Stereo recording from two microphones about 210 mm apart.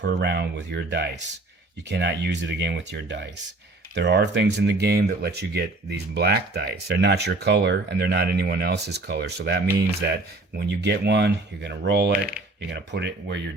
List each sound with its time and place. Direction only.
0.0 s speech: 55° right (ahead or behind)